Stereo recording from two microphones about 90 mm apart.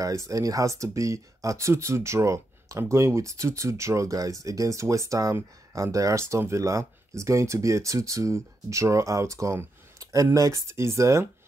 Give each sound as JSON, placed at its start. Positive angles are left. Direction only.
{"t": 0.0, "sound": "speech", "side_deg": -35}